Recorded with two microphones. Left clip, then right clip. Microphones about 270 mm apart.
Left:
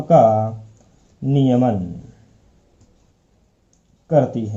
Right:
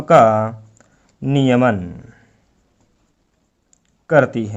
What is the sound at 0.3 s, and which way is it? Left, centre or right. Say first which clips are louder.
Speech: right 1 dB; right.